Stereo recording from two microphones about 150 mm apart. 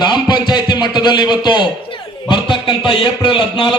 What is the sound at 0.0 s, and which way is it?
A man's voice, 30° left (ahead or behind).